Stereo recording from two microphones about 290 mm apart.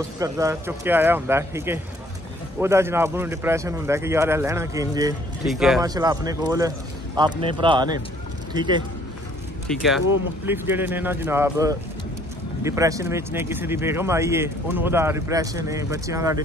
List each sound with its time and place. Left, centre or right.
0.2 s speech: centre
5.9 s speech: centre
9.7 s speech: centre